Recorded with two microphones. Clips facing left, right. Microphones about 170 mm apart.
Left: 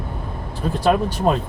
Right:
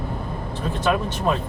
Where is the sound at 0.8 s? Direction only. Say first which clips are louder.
Left 4 dB; 35° left (ahead or behind).